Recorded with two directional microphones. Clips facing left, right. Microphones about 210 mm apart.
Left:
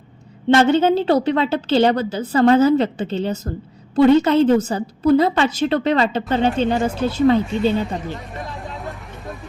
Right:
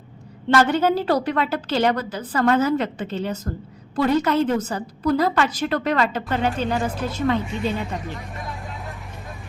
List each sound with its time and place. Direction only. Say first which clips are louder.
0.5 s a woman's voice: left 4 dB; 25° left (ahead or behind)